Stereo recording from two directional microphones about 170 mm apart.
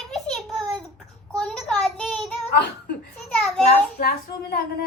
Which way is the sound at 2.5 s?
75° left (ahead or behind).